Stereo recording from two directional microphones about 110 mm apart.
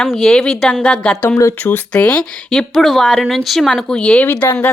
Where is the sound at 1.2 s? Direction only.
25° left (ahead or behind).